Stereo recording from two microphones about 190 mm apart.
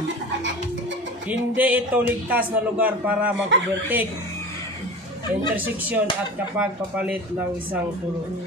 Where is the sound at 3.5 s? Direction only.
70° right (ahead or behind).